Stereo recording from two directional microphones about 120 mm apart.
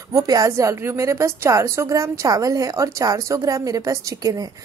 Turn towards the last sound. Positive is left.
turn(degrees=-30)  # may be behind; listen again after turning